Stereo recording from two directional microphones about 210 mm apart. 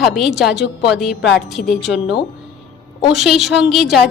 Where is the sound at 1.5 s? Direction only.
Centre (ahead or behind).